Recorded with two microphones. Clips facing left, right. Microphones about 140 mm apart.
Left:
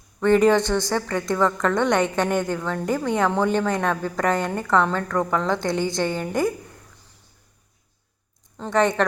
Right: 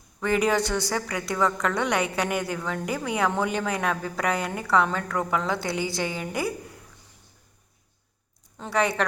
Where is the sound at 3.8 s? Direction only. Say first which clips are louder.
Left 4 dB; 35° left (ahead or behind).